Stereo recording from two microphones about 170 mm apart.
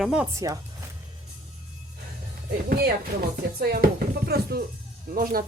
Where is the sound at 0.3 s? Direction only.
20° right (ahead or behind).